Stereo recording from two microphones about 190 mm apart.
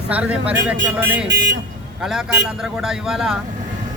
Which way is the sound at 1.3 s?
65° right (ahead or behind).